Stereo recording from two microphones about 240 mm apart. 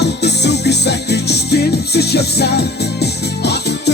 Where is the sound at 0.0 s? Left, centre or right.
Left.